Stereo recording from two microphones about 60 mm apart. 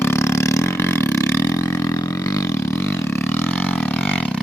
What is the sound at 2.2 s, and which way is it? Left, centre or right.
Vehicle, left.